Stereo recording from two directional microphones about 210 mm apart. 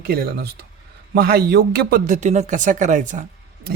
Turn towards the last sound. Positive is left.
turn(degrees=-35)  # may be behind; listen again after turning